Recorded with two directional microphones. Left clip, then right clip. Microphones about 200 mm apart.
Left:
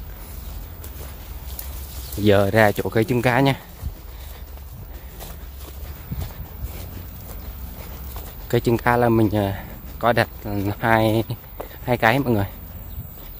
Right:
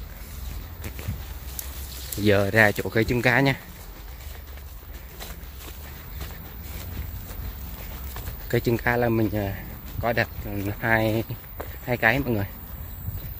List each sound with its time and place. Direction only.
2.2 s speech: 10° left (ahead or behind)
8.5 s speech: 10° left (ahead or behind)